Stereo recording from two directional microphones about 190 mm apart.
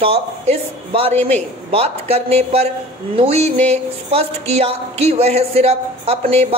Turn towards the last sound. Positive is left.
turn(degrees=-30)  # may be behind; listen again after turning